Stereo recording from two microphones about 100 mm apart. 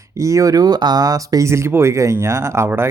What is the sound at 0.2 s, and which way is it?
Speech, 30° right (ahead or behind).